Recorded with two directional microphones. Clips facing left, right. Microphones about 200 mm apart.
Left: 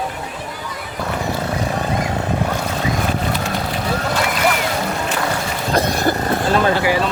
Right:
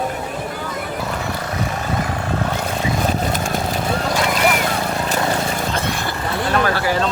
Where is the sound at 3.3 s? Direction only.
45° right (ahead or behind).